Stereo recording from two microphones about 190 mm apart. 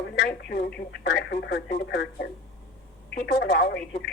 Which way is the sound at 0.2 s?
60° left (ahead or behind).